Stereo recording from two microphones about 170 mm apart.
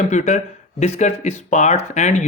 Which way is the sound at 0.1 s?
45° left (ahead or behind).